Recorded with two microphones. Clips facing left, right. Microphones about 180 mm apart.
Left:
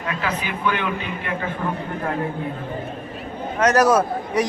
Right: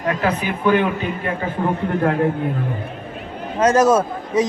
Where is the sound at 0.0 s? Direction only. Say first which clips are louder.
Right 6 dB; 40° right (ahead or behind).